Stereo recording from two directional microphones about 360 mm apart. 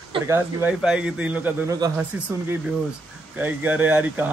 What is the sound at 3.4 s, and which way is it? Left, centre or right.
Speech, centre.